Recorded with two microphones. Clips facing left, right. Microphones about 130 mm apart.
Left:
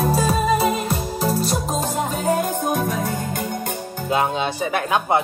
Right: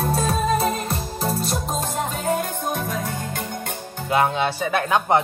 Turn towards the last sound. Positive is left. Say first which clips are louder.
# even
turn(degrees=15)  # may be behind; listen again after turning